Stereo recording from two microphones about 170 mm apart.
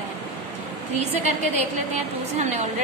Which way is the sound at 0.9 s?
40° right (ahead or behind).